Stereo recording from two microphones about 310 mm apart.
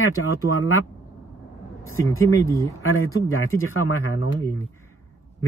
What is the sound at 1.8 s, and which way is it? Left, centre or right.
Speech, centre.